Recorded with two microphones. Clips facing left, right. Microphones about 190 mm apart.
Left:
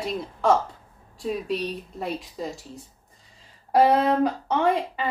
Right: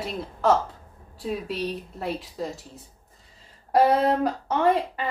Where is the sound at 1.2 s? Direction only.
Centre (ahead or behind).